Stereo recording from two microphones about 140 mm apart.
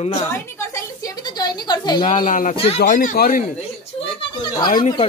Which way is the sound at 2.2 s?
70° left (ahead or behind).